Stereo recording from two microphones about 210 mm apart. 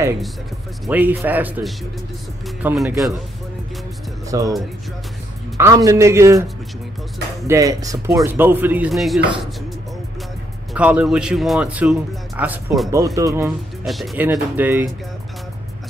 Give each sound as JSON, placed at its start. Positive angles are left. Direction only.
{"t": 0.8, "sound": "speech", "side_deg": -10}
{"t": 4.3, "sound": "speech", "side_deg": -15}
{"t": 5.6, "sound": "speech", "side_deg": -15}
{"t": 7.4, "sound": "speech", "side_deg": -15}
{"t": 10.7, "sound": "speech", "side_deg": -5}
{"t": 12.9, "sound": "speech", "side_deg": -15}
{"t": 13.8, "sound": "speech", "side_deg": 0}